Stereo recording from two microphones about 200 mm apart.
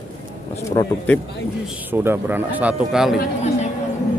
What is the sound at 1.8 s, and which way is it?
Speech, 10° right (ahead or behind).